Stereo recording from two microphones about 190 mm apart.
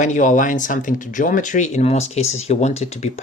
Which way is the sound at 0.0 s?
40° left (ahead or behind).